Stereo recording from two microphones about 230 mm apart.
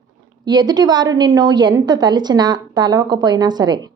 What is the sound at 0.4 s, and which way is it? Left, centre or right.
A woman's voice, centre.